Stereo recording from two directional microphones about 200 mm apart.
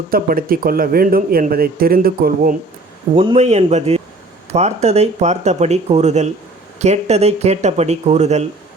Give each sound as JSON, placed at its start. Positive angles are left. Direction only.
{"t": 0.1, "sound": "speech", "side_deg": -45}
{"t": 3.2, "sound": "speech", "side_deg": -30}